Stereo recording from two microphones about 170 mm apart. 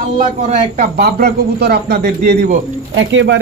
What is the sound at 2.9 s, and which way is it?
Speech, 90° right.